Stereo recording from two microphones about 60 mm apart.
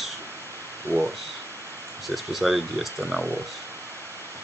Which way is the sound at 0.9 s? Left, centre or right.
Right.